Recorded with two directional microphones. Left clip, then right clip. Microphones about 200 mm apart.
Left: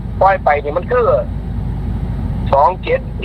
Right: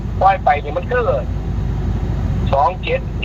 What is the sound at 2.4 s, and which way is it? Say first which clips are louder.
Speech: left 4 dB; 10° left (ahead or behind).